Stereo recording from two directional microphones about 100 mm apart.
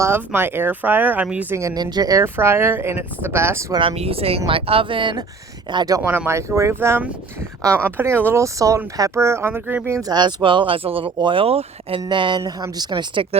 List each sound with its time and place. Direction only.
0.3 s speech: 20° right (ahead or behind)
1.7 s speech: 40° right (ahead or behind)
2.2 s speech: 25° right (ahead or behind)
3.8 s speech: 75° right (ahead or behind); by 5.1 s 60° right (ahead or behind)
5.7 s speech: 40° right (ahead or behind)
6.1 s speech: 25° right (ahead or behind)
10.0 s speech: 45° right (ahead or behind)
11.4 s speech: 70° right (ahead or behind)
12.0 s speech: 50° right (ahead or behind)
12.4 s speech: 35° right (ahead or behind)